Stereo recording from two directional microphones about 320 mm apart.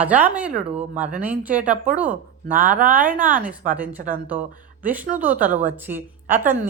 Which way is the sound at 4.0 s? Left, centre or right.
Right.